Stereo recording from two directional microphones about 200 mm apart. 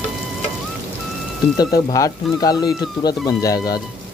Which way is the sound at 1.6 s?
20° left (ahead or behind).